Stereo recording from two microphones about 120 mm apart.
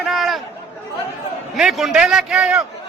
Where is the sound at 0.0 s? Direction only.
Centre (ahead or behind).